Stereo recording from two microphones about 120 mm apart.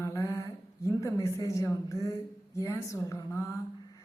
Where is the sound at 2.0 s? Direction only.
25° left (ahead or behind).